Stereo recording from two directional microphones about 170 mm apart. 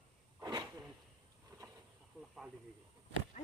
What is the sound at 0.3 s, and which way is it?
Sneeze, 20° right (ahead or behind).